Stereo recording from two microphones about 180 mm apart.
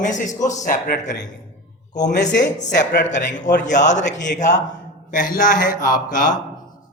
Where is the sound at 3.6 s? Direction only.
45° left (ahead or behind).